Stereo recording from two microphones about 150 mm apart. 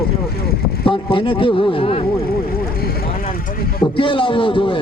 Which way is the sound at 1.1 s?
35° left (ahead or behind).